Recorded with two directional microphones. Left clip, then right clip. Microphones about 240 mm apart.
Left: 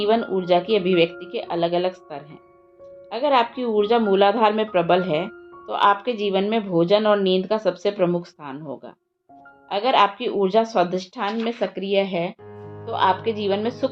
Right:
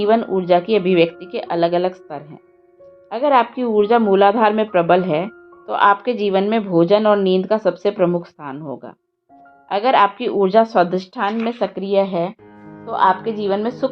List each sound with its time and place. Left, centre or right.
0.0 s a woman's voice: right